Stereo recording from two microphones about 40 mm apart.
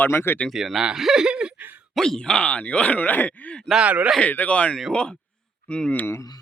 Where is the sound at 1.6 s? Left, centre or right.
Right.